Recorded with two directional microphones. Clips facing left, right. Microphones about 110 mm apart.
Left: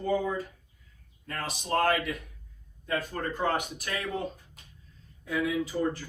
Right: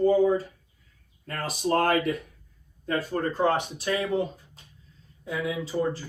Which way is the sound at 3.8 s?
20° right (ahead or behind).